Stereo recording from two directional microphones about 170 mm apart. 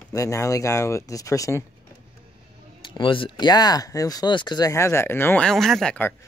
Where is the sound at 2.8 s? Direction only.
30° left (ahead or behind); by 6.1 s 10° left (ahead or behind).